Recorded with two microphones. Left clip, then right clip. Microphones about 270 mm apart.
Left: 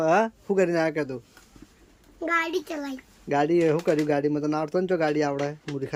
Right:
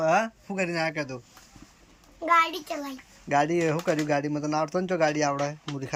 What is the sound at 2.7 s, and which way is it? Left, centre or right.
Speech, centre.